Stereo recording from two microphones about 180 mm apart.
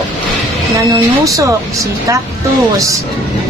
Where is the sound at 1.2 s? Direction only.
20° right (ahead or behind).